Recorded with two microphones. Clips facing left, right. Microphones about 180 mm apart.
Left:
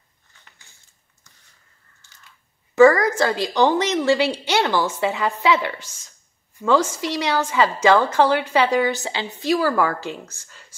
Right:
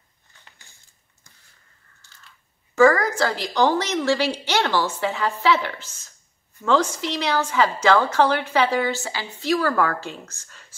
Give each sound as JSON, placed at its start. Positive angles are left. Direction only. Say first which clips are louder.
{"t": 2.8, "sound": "a woman's voice", "louder": "left 3 dB", "side_deg": 20}
{"t": 9.5, "sound": "a woman's voice", "louder": "left 1 dB", "side_deg": 10}